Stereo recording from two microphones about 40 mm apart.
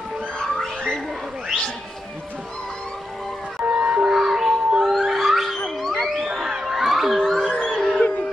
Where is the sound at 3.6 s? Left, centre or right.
Right.